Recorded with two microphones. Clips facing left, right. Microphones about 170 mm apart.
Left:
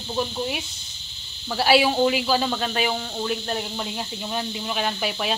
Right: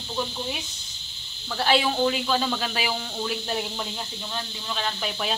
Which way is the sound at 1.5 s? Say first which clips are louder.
Left 4 dB; 10° left (ahead or behind).